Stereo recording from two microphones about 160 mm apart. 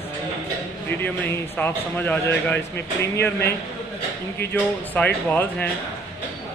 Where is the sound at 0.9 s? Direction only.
10° left (ahead or behind).